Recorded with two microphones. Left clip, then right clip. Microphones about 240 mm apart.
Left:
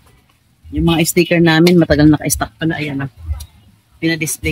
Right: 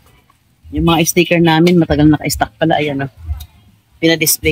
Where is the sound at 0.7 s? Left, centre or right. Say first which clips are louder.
Right 2 dB; centre.